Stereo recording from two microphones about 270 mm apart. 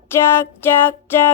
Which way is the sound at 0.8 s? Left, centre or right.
Centre.